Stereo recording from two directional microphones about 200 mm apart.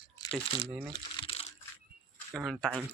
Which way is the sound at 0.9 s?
30° left (ahead or behind).